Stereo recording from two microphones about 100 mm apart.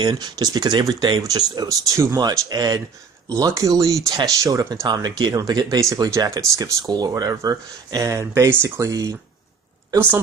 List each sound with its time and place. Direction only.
0.0 s speech: 45° right (ahead or behind)
2.1 s speech: 40° right (ahead or behind)